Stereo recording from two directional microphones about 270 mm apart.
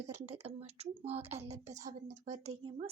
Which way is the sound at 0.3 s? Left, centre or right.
Right.